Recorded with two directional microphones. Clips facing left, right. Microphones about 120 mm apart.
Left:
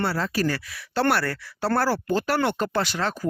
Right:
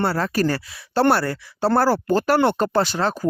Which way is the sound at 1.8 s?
40° right (ahead or behind).